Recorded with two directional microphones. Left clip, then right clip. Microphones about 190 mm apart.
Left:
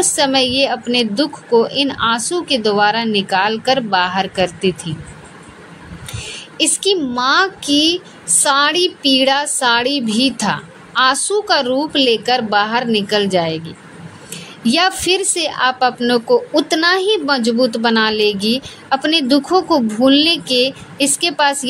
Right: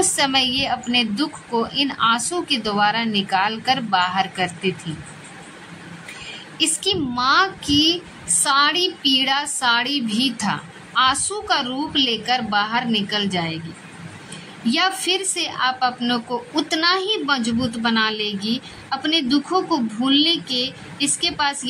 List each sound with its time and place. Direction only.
0.1 s a woman's voice: 20° left (ahead or behind)
6.6 s a woman's voice: 25° left (ahead or behind)
14.6 s a woman's voice: 25° left (ahead or behind)